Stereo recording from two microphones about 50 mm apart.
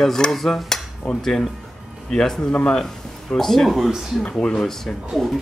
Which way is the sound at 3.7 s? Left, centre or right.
Centre.